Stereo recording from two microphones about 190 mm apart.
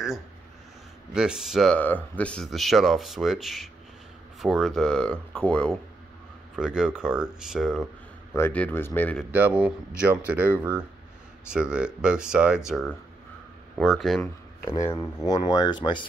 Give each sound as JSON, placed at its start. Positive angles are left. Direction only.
{"t": 1.1, "sound": "speech", "side_deg": -5}
{"t": 8.4, "sound": "speech", "side_deg": 10}
{"t": 9.3, "sound": "speech", "side_deg": -10}
{"t": 14.9, "sound": "speech", "side_deg": 20}